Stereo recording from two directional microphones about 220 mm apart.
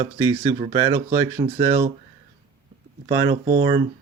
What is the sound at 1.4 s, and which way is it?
Speech, 25° right (ahead or behind).